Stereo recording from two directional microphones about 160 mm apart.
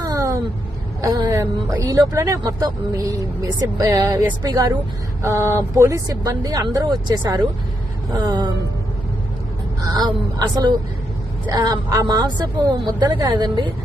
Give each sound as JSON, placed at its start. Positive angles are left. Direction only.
{"t": 0.0, "sound": "a sound", "side_deg": -20}
{"t": 1.0, "sound": "speech", "side_deg": -25}
{"t": 9.8, "sound": "speech", "side_deg": -25}